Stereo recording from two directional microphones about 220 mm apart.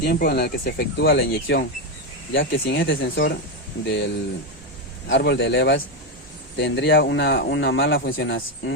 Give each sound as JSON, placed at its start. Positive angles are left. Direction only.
{"t": 0.0, "sound": "speech", "side_deg": 45}
{"t": 5.0, "sound": "speech", "side_deg": 50}